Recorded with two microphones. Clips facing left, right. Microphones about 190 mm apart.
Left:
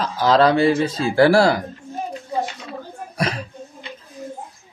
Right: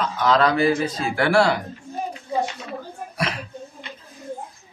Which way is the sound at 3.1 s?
40° left (ahead or behind).